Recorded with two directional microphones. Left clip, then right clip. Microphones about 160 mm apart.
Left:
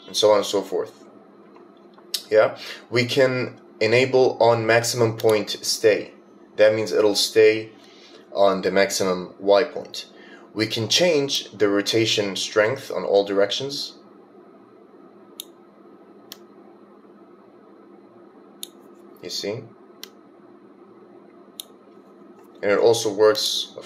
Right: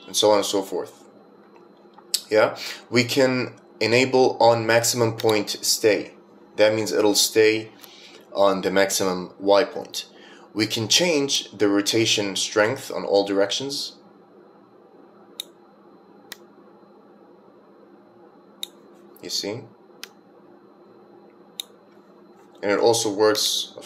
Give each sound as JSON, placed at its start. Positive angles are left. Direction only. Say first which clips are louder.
{"t": 0.1, "sound": "speech", "louder": "left 1 dB", "side_deg": -25}
{"t": 2.0, "sound": "speech", "louder": "left 1 dB", "side_deg": -25}
{"t": 19.2, "sound": "speech", "louder": "right 1 dB", "side_deg": -30}
{"t": 22.6, "sound": "speech", "louder": "left 2 dB", "side_deg": -25}